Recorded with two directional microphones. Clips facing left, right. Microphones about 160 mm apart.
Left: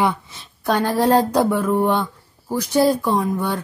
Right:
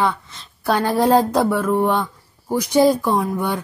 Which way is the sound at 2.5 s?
15° right (ahead or behind).